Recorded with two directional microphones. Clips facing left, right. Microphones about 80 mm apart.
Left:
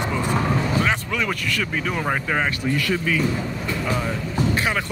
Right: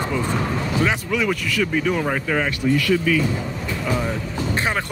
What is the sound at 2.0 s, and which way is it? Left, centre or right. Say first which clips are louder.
Speech: right 1 dB; centre.